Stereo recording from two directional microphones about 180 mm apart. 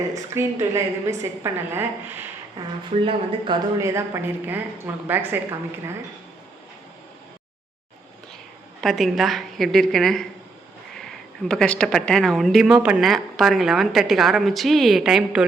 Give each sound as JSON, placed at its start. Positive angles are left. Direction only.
{"t": 0.1, "sound": "a woman's voice", "side_deg": -15}
{"t": 3.8, "sound": "a woman's voice", "side_deg": -15}
{"t": 8.8, "sound": "speech", "side_deg": 0}